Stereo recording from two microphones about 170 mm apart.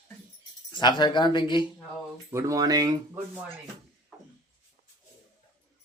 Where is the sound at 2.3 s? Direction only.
20° right (ahead or behind).